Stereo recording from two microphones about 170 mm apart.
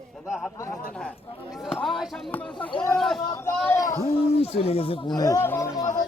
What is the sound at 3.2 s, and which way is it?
Speech, 25° left (ahead or behind).